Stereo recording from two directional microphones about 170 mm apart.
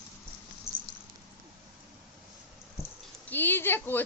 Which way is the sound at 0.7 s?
25° right (ahead or behind).